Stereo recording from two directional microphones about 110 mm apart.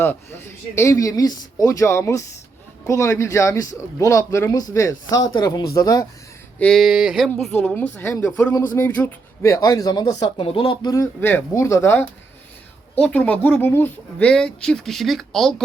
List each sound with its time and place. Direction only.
0.0 s a man's voice: 20° left (ahead or behind)
6.6 s speech: 5° left (ahead or behind)
7.3 s a man's voice: 10° left (ahead or behind)
9.5 s speech: 30° left (ahead or behind)
11.2 s a man's voice: 20° left (ahead or behind)
13.0 s speech: 10° left (ahead or behind)